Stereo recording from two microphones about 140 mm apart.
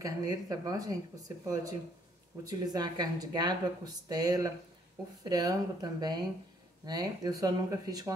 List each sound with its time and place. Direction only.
0.0 s speech: 25° right (ahead or behind)